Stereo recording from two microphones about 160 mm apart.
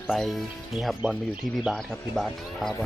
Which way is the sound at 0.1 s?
Centre (ahead or behind).